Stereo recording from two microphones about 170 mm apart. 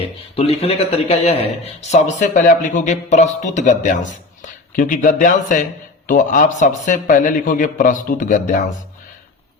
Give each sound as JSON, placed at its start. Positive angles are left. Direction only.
{"t": 0.3, "sound": "speech", "side_deg": 35}